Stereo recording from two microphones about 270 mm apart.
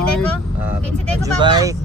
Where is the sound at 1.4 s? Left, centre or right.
Centre.